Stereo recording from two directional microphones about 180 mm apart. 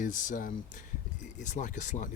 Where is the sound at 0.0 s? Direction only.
45° left (ahead or behind).